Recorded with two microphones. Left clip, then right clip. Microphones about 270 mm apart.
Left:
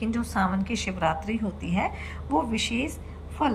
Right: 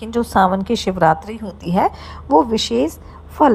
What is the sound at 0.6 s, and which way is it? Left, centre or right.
Speech, centre.